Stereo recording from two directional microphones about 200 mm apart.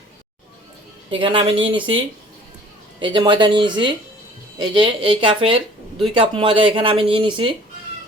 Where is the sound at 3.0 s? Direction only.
25° right (ahead or behind).